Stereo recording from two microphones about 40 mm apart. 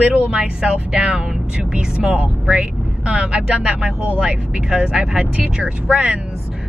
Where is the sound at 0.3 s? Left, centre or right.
Right.